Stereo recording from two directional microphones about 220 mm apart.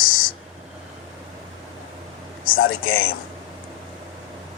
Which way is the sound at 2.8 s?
65° left (ahead or behind).